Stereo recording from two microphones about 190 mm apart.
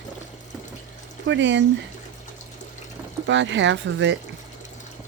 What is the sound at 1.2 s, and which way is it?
Speech, 70° right (ahead or behind).